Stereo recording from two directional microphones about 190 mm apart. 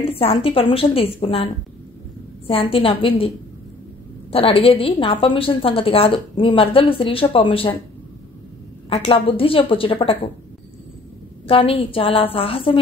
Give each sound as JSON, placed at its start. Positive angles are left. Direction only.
{"t": 0.1, "sound": "a woman's voice", "side_deg": 30}
{"t": 4.3, "sound": "a woman's voice", "side_deg": 30}
{"t": 8.8, "sound": "a woman's voice", "side_deg": 30}
{"t": 11.4, "sound": "a woman's voice", "side_deg": 30}